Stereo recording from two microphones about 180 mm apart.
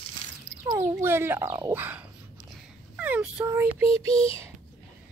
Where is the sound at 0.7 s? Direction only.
15° right (ahead or behind).